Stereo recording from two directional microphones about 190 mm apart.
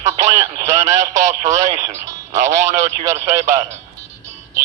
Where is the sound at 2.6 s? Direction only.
15° right (ahead or behind).